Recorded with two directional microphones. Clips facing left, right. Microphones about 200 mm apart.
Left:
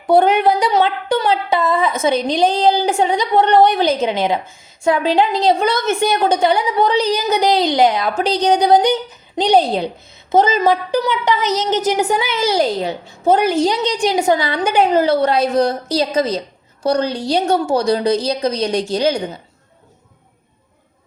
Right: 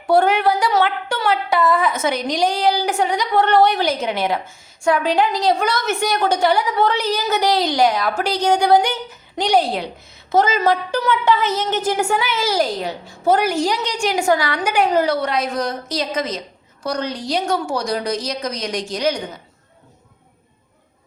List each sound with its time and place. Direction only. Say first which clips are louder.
0.1 s a woman's voice: left 3 dB; 20° left (ahead or behind)